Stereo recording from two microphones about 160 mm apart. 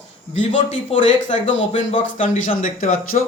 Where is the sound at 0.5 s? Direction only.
50° left (ahead or behind).